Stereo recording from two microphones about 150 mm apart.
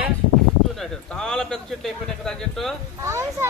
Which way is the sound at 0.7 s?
5° left (ahead or behind).